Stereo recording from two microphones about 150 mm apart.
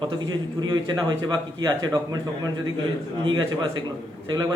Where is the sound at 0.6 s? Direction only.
30° right (ahead or behind).